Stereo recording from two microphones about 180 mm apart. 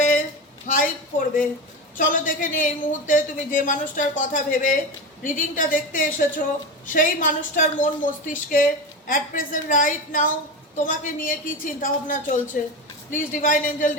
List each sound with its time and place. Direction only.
0.7 s a woman's voice: 50° left (ahead or behind)